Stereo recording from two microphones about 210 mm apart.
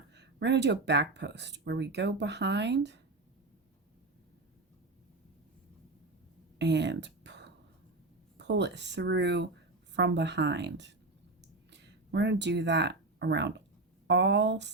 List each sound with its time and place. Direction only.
0.1 s speech: 55° right (ahead or behind)
6.6 s a sound: 55° right (ahead or behind)
8.4 s speech: 55° right (ahead or behind)